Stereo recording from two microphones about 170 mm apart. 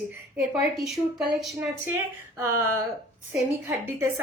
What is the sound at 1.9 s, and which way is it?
A woman's voice, 15° right (ahead or behind).